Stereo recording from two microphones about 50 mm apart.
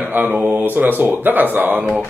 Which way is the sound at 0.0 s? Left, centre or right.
Right.